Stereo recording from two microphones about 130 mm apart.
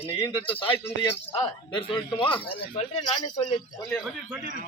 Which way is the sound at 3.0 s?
30° left (ahead or behind).